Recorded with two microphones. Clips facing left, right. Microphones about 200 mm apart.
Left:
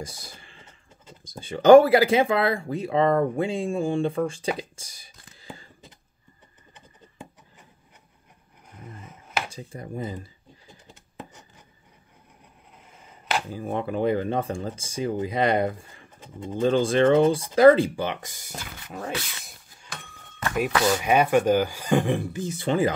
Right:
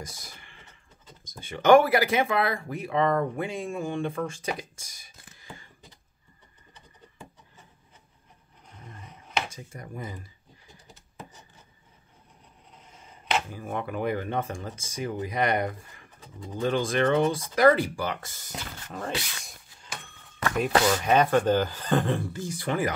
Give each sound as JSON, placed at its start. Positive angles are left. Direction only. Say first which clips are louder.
{"t": 0.0, "sound": "a sound", "louder": "left 4 dB", "side_deg": 30}
{"t": 1.2, "sound": "speech", "louder": "left 5 dB", "side_deg": 30}
{"t": 6.7, "sound": "scratch", "louder": "left 1 dB", "side_deg": 20}
{"t": 8.6, "sound": "a sound", "louder": "left 4 dB", "side_deg": 5}
{"t": 9.5, "sound": "speech", "louder": "left 5 dB", "side_deg": 30}
{"t": 13.5, "sound": "speech", "louder": "left 4 dB", "side_deg": 30}
{"t": 20.8, "sound": "speech", "louder": "left 4 dB", "side_deg": 10}